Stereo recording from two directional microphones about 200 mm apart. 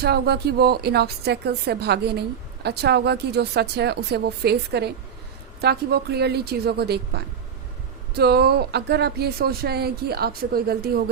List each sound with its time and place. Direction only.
0.0 s speech: 55° right (ahead or behind)